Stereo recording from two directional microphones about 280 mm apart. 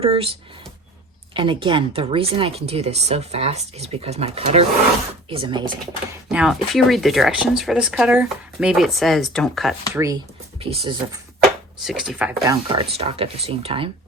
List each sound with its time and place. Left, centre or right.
0.0 s speech: centre
6.2 s speech: centre
9.9 s speech: centre
11.8 s speech: centre
12.5 s speech: centre